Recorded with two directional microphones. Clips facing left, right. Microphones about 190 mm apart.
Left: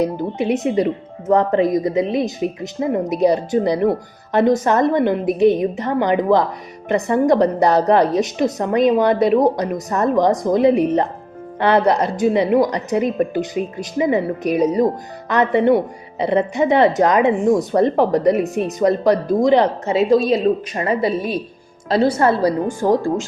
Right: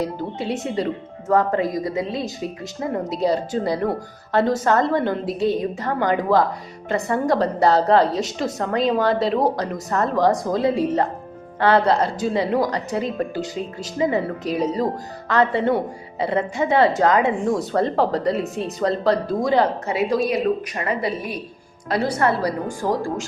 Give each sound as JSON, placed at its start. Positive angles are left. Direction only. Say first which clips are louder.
{"t": 0.0, "sound": "a woman's voice", "louder": "left 6 dB", "side_deg": 20}